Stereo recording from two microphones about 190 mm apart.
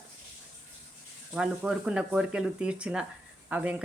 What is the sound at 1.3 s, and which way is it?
Speech, 5° right (ahead or behind).